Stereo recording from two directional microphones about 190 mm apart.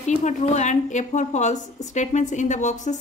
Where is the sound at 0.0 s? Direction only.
40° left (ahead or behind).